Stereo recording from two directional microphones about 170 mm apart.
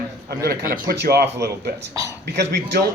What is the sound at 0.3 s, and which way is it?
A man's voice, 60° right (ahead or behind).